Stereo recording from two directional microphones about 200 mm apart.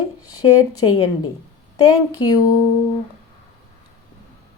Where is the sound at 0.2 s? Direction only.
20° left (ahead or behind).